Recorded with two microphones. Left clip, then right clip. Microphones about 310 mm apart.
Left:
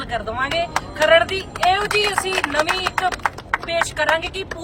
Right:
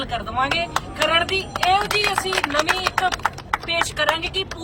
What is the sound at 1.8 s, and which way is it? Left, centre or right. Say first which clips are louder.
Speech: left 1 dB; centre.